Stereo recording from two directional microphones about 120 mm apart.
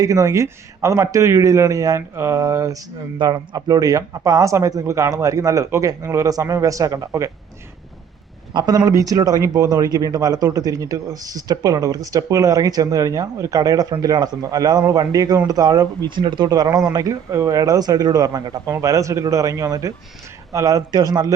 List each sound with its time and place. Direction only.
0.0 s speech: 30° right (ahead or behind)
8.5 s speech: 35° right (ahead or behind)